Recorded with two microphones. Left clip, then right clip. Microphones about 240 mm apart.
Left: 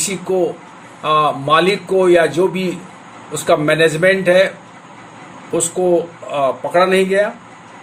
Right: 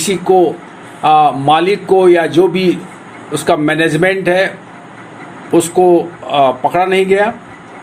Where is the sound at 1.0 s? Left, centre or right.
Centre.